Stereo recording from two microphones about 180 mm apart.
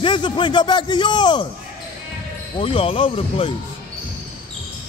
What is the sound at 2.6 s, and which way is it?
Speech, 30° left (ahead or behind).